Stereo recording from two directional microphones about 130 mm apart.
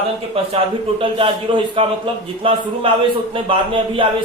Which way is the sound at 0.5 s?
40° right (ahead or behind).